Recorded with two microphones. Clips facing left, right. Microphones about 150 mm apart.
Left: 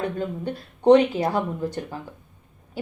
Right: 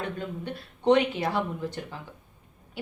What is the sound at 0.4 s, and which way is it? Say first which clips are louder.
A woman's voice: left 6 dB; 40° left (ahead or behind).